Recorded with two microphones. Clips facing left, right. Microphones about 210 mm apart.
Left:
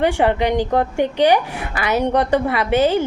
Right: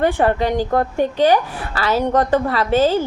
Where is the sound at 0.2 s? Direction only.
15° left (ahead or behind).